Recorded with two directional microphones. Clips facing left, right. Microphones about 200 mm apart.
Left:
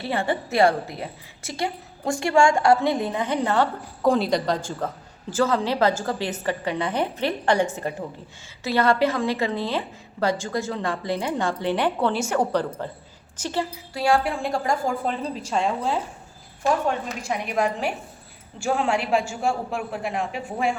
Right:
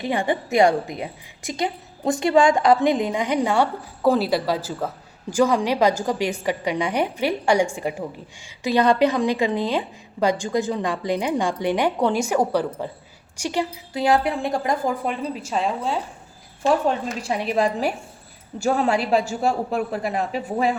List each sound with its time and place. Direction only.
0.0 s a woman's voice: 15° right (ahead or behind)
16.8 s a woman's voice: 30° right (ahead or behind)